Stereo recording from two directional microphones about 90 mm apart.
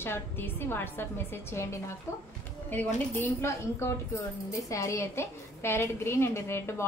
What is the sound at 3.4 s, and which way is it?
A woman's voice, 35° left (ahead or behind).